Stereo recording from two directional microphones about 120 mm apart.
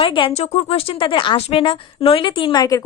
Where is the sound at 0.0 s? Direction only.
45° left (ahead or behind).